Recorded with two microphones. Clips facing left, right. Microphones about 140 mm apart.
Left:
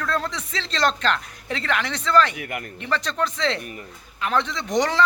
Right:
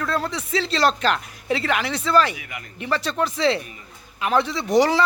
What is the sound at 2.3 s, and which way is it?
Speech, 55° left (ahead or behind).